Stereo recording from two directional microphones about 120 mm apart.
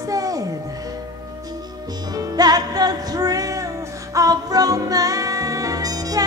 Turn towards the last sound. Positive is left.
turn(degrees=-30)  # may be behind; listen again after turning